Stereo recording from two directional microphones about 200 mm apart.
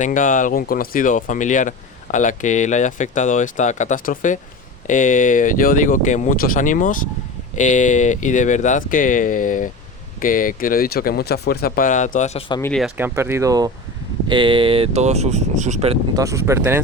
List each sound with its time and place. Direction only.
0.0 s speech: 40° left (ahead or behind)
12.5 s speech: 10° left (ahead or behind)
12.8 s speech: 10° right (ahead or behind); by 16.0 s 35° right (ahead or behind)
16.1 s speech: 15° right (ahead or behind)